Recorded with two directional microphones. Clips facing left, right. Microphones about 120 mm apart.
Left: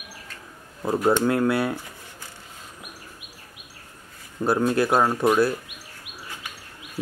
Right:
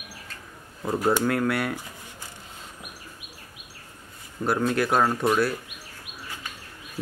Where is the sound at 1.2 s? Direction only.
15° left (ahead or behind).